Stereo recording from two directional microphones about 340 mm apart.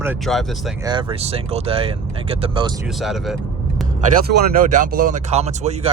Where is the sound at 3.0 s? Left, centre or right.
Centre.